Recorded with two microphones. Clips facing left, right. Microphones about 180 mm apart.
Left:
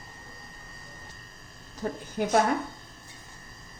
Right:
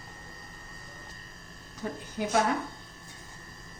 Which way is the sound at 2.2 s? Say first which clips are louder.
Left 3 dB; 55° left (ahead or behind).